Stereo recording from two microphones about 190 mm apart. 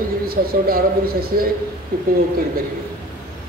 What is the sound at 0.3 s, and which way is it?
A man's voice, 50° right (ahead or behind).